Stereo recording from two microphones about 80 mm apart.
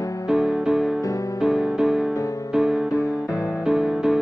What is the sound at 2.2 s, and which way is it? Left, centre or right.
Music, left.